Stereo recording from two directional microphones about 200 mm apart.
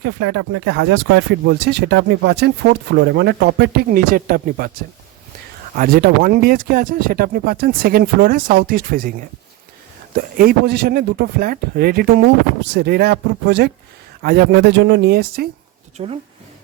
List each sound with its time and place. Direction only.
0.0 s speech: 55° right (ahead or behind)
5.7 s speech: 45° right (ahead or behind)
16.0 s speech: 30° right (ahead or behind)